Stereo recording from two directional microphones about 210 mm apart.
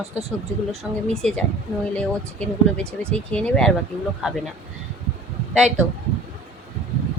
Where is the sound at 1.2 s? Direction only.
5° left (ahead or behind).